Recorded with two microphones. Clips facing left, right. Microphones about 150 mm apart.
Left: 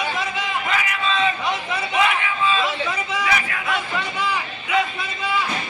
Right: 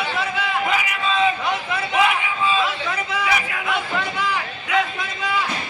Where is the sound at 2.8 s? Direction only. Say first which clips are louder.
Even; 10° left (ahead or behind).